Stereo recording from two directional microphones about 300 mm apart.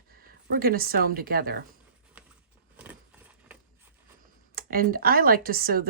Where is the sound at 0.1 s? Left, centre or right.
Right.